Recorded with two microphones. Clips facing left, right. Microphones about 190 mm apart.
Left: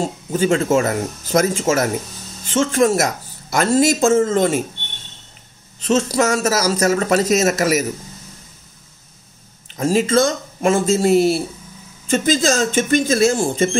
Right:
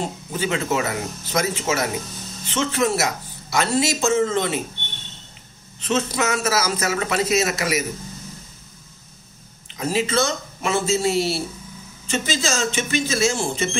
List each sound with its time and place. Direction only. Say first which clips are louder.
0.3 s a man's voice: left 8 dB; 45° left (ahead or behind)
5.8 s a man's voice: left 6 dB; 40° left (ahead or behind)
9.8 s a man's voice: left 6 dB; 45° left (ahead or behind)